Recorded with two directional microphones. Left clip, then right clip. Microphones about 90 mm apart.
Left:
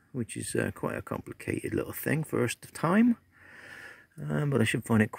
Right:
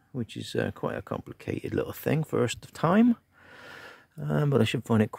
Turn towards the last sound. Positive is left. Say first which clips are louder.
# right 1 dB
turn(degrees=-5)  # may be behind; listen again after turning